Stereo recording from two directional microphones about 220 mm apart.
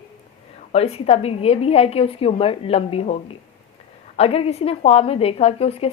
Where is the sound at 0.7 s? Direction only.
25° left (ahead or behind).